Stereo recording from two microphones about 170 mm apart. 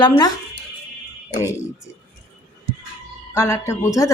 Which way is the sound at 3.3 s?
15° left (ahead or behind).